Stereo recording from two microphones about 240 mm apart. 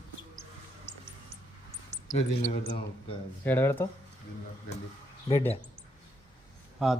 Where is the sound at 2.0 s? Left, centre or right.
Left.